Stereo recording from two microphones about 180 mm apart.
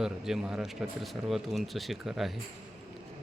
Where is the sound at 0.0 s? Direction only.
5° right (ahead or behind).